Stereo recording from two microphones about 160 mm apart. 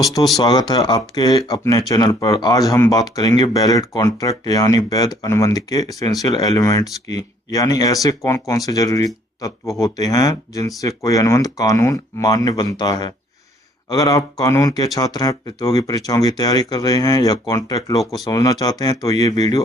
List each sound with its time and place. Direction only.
0.3 s speech: 25° left (ahead or behind)